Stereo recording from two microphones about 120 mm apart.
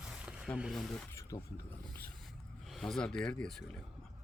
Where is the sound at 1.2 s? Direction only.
30° left (ahead or behind).